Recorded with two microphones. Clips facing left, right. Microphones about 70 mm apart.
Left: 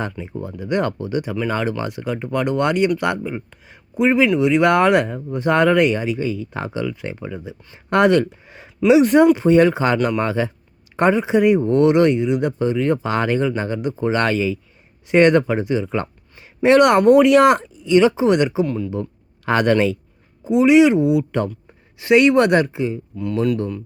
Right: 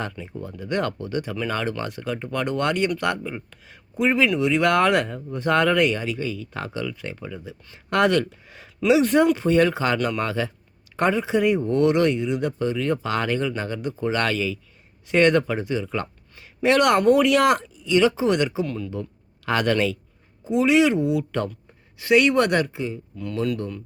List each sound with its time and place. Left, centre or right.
0.4 s speech: centre
20.4 s speech: centre